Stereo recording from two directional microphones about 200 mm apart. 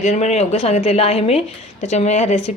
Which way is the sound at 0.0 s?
35° left (ahead or behind).